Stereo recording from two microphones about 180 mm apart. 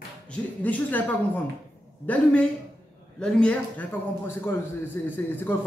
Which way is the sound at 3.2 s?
5° left (ahead or behind).